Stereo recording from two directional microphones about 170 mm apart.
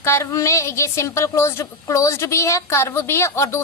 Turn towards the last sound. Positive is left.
turn(degrees=15)  # may be behind; listen again after turning